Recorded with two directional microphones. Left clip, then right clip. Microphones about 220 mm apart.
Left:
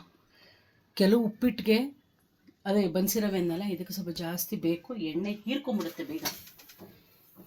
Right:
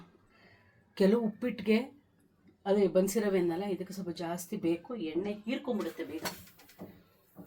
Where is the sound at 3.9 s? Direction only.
30° left (ahead or behind).